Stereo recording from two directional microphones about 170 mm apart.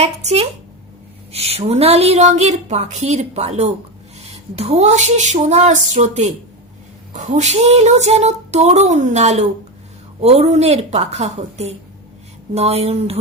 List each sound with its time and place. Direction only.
0.0 s a woman's voice: 40° right (ahead or behind)